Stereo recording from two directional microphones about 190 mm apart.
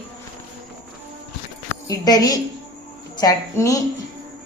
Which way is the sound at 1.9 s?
20° left (ahead or behind).